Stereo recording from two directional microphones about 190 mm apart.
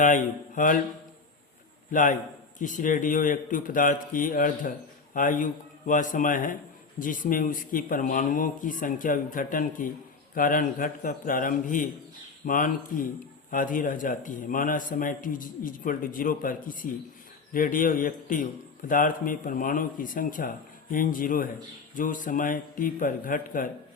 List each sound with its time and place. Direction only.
0.0 s a man's voice: 45° left (ahead or behind)
1.9 s a man's voice: 45° left (ahead or behind)